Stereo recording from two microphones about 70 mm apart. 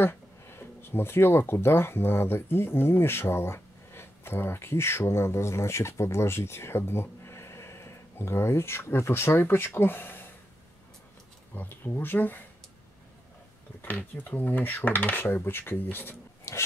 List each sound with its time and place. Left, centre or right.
0.0 s speech: left
11.5 s speech: left
13.7 s speech: left
16.5 s a sound: left